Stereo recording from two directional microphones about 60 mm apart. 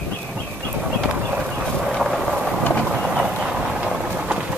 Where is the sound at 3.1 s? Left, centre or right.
Centre.